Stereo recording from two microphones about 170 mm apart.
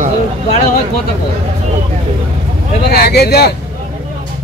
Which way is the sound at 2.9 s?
70° left (ahead or behind).